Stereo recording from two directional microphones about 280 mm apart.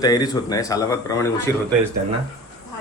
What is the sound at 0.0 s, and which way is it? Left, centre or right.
Speech, centre.